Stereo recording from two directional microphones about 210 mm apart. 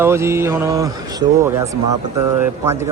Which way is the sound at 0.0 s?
10° right (ahead or behind).